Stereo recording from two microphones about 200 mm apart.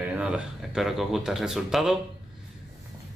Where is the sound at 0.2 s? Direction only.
5° right (ahead or behind).